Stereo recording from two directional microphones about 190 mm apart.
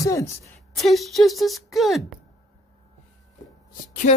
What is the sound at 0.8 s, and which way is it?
Speech, centre (ahead or behind).